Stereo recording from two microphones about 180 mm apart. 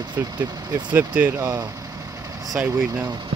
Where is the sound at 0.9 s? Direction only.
10° right (ahead or behind).